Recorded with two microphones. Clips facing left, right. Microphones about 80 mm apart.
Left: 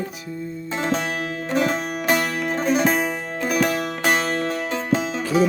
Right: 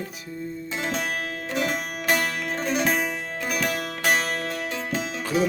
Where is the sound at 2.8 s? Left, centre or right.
Left.